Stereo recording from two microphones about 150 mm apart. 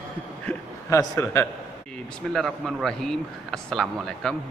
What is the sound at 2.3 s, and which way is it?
A man's voice, centre (ahead or behind).